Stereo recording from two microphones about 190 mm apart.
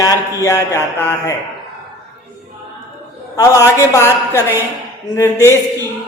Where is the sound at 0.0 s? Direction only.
15° left (ahead or behind).